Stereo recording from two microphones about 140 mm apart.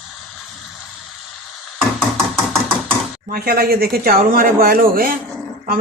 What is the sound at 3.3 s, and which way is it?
Speech, 90° right.